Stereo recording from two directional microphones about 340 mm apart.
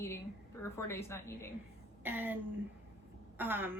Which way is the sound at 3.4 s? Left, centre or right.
Centre.